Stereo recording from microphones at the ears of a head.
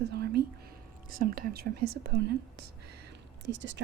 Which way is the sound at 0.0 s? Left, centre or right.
Right.